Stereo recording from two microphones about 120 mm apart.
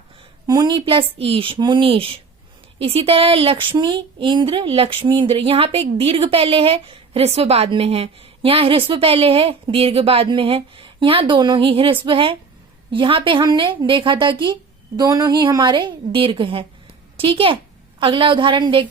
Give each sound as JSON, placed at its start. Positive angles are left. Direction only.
{"t": 0.4, "sound": "speech", "side_deg": -35}
{"t": 14.9, "sound": "a woman's voice", "side_deg": -35}